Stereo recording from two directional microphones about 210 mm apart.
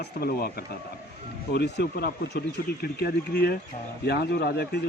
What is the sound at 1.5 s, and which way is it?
Speech, 50° left (ahead or behind).